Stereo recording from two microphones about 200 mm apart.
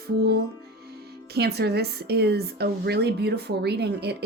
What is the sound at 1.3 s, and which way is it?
Speech, 55° right (ahead or behind).